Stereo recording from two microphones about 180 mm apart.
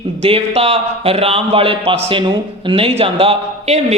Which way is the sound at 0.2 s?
35° right (ahead or behind).